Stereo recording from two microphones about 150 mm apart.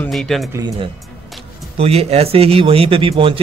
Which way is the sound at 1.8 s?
45° right (ahead or behind).